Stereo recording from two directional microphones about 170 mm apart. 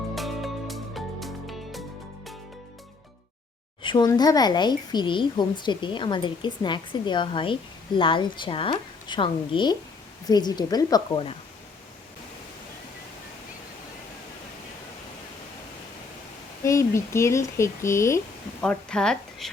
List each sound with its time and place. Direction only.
0.2 s music: centre (ahead or behind)
3.8 s speech: 25° left (ahead or behind)
16.6 s speech: 15° left (ahead or behind)
18.6 s a woman's voice: 5° left (ahead or behind)